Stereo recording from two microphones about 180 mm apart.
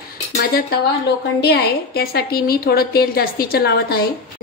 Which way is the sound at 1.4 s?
60° left (ahead or behind).